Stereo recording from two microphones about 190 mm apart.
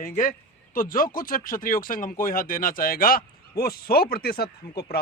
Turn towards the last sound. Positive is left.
turn(degrees=55)  # may be behind; listen again after turning